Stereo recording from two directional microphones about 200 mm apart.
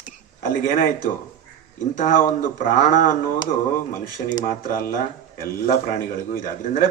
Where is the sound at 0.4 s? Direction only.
40° left (ahead or behind).